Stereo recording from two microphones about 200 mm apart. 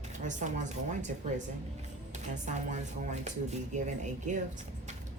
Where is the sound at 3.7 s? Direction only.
35° right (ahead or behind).